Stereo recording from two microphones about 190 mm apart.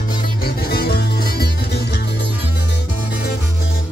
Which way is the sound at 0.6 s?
55° left (ahead or behind).